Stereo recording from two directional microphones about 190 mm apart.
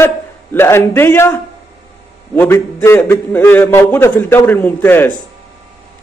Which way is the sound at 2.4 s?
10° left (ahead or behind).